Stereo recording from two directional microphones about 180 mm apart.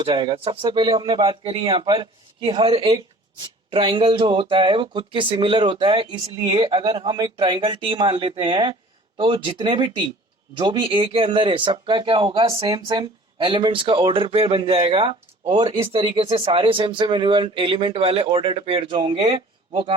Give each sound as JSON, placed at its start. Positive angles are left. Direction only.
{"t": 0.0, "sound": "speech", "side_deg": -30}